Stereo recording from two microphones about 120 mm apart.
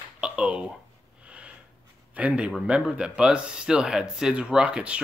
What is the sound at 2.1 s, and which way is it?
Speech, 10° right (ahead or behind).